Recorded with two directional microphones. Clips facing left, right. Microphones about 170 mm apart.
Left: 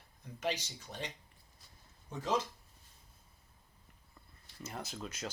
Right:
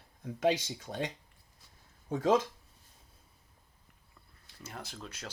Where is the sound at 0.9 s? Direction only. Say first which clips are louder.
Right 8 dB; 45° right (ahead or behind).